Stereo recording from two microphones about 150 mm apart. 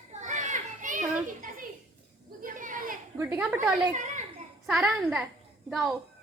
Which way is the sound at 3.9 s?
55° right (ahead or behind).